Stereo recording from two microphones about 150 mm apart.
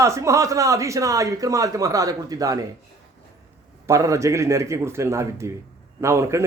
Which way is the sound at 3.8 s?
20° right (ahead or behind).